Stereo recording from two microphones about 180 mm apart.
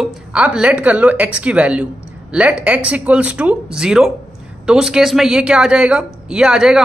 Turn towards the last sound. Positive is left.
turn(degrees=-5)  # may be behind; listen again after turning